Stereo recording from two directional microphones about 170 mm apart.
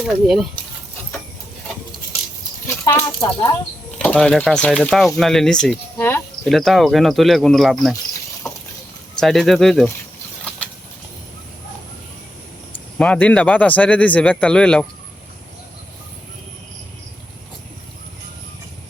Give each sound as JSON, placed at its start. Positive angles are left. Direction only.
{"t": 0.0, "sound": "speech", "side_deg": 0}
{"t": 2.6, "sound": "speech", "side_deg": 20}
{"t": 3.9, "sound": "speech", "side_deg": 5}
{"t": 6.5, "sound": "speech", "side_deg": 0}
{"t": 8.4, "sound": "vehicle", "side_deg": 20}
{"t": 9.2, "sound": "speech", "side_deg": 0}
{"t": 13.0, "sound": "speech", "side_deg": 5}